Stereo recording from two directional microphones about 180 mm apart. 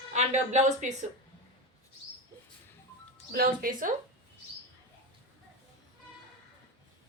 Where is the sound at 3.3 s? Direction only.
50° right (ahead or behind).